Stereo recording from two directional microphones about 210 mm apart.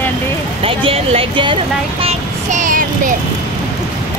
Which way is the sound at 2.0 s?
35° right (ahead or behind).